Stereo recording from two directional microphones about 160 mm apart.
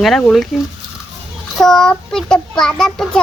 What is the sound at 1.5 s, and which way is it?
Speech, 5° left (ahead or behind).